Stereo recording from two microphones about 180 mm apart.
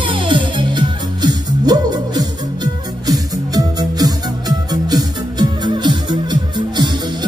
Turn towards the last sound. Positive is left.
turn(degrees=-25)  # may be behind; listen again after turning